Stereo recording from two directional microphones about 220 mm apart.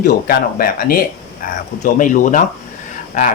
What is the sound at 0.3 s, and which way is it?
Speech, 40° left (ahead or behind).